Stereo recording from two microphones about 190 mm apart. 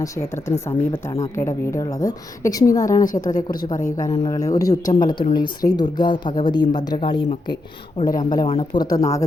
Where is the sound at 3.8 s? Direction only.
45° left (ahead or behind).